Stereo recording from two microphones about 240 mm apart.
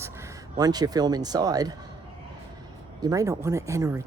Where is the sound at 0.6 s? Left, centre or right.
Centre.